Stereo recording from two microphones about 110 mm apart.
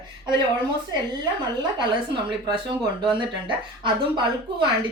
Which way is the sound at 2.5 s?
45° right (ahead or behind).